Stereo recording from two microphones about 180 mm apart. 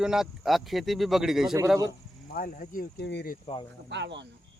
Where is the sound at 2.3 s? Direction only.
50° left (ahead or behind).